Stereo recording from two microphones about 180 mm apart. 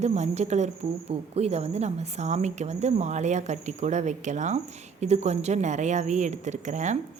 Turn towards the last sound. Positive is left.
turn(degrees=-40)  # may be behind; listen again after turning